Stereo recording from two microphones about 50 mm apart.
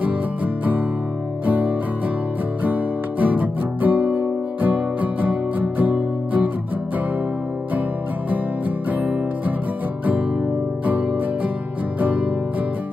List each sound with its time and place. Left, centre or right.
1.4 s music: right
8.3 s music: right
10.9 s music: right